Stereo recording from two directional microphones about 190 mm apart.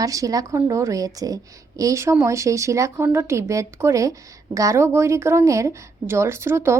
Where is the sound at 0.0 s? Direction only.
15° right (ahead or behind).